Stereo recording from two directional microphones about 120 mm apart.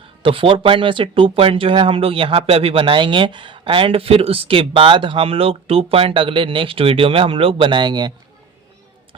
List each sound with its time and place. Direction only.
0.2 s speech: 45° right (ahead or behind)